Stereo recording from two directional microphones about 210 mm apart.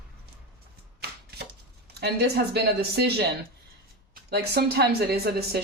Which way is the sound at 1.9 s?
50° right (ahead or behind).